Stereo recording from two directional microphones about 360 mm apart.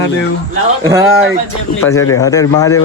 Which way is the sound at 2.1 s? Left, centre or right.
Centre.